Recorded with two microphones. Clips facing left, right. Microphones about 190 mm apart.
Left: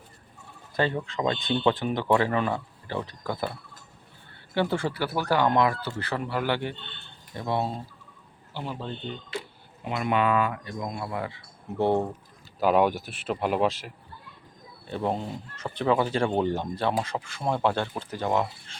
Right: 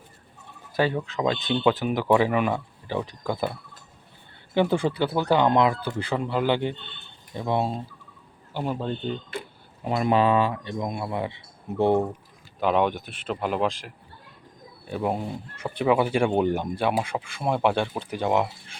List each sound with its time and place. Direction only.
0.8 s speech: 5° right (ahead or behind)
4.5 s speech: 15° right (ahead or behind)
8.5 s speech: 50° right (ahead or behind)
9.9 s speech: 35° right (ahead or behind); by 12.0 s 15° right (ahead or behind)
12.5 s speech: 5° left (ahead or behind)
14.8 s speech: 10° right (ahead or behind)